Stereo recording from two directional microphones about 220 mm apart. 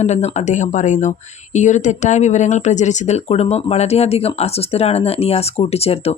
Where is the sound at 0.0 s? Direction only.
30° left (ahead or behind).